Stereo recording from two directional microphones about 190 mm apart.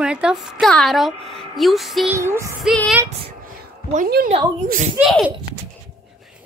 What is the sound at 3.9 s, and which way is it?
Speech, 45° right (ahead or behind).